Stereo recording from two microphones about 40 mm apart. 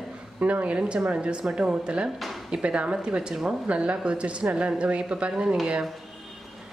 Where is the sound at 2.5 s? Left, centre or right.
Right.